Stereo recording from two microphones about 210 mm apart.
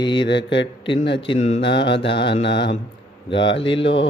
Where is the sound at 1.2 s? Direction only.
25° left (ahead or behind).